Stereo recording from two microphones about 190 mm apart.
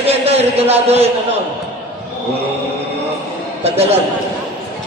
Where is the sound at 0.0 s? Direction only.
35° right (ahead or behind).